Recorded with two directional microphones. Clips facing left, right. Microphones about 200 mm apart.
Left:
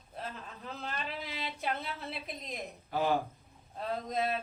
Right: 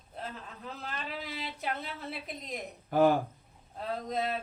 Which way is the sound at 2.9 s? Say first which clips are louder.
Right 7 dB; 50° right (ahead or behind).